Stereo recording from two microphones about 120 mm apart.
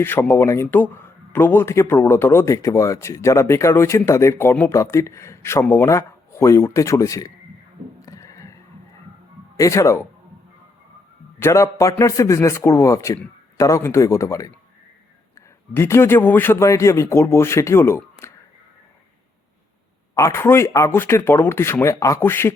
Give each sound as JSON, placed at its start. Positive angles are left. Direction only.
{"t": 0.0, "sound": "speech", "side_deg": 20}
{"t": 8.0, "sound": "a sound", "side_deg": 30}
{"t": 9.6, "sound": "speech", "side_deg": 25}
{"t": 11.3, "sound": "speech", "side_deg": 20}
{"t": 20.1, "sound": "speech", "side_deg": 25}